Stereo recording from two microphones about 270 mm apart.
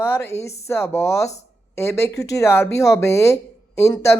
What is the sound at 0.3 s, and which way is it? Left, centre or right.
A woman's voice, centre.